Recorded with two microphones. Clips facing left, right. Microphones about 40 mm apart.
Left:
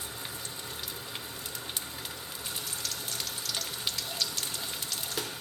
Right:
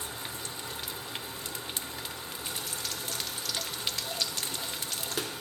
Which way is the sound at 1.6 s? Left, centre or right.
Centre.